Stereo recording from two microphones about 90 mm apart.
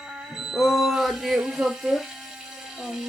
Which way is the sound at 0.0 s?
5° right (ahead or behind).